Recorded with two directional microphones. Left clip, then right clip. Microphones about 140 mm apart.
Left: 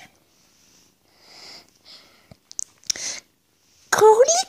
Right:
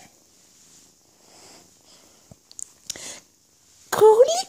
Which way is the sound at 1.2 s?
10° right (ahead or behind).